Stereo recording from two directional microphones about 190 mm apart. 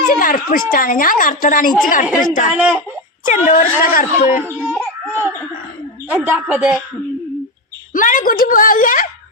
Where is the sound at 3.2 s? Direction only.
40° left (ahead or behind).